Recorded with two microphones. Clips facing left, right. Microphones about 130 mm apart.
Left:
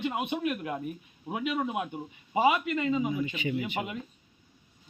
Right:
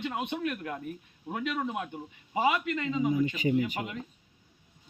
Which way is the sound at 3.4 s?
40° right (ahead or behind).